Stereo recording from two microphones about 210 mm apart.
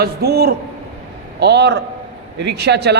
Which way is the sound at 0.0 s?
50° right (ahead or behind).